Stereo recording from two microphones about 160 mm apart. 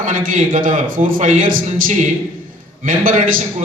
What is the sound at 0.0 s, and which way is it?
A man's voice, 55° right (ahead or behind).